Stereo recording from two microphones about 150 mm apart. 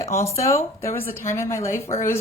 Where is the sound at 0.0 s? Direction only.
20° left (ahead or behind).